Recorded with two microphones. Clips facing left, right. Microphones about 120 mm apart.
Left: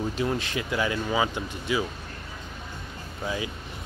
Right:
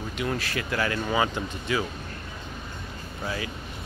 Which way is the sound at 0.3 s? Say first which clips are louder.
Left 1 dB; 20° left (ahead or behind).